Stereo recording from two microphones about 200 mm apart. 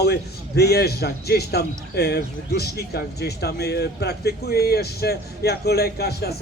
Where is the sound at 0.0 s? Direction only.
55° left (ahead or behind).